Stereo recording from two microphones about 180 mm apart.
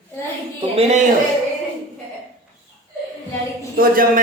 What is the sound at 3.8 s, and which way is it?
Speech, 50° right (ahead or behind).